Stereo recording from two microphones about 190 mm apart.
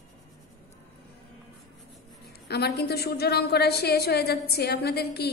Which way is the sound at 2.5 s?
60° left (ahead or behind).